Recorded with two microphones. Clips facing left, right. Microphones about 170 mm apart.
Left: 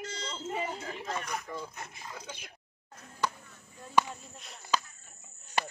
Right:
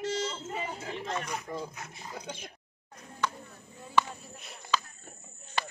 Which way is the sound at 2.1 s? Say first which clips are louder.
Right 7 dB; 35° right (ahead or behind).